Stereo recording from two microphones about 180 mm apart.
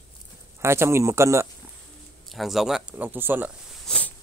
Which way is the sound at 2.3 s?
Centre (ahead or behind).